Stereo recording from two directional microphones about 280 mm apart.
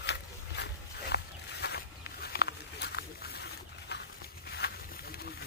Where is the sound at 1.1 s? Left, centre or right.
Left.